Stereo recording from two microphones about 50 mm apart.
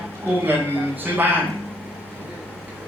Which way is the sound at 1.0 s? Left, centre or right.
Right.